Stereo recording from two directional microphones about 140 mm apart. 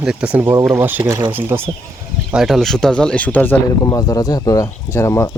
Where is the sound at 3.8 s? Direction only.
25° left (ahead or behind).